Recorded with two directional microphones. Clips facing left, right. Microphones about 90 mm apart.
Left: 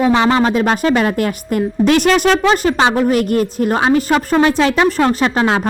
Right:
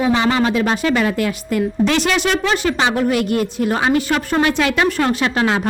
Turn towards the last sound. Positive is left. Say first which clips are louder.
# left 3 dB
turn(degrees=30)  # may be behind; listen again after turning